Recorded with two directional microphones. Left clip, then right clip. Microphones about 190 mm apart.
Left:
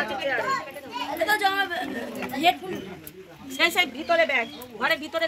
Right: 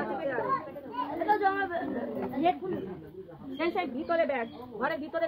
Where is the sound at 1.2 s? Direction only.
20° left (ahead or behind).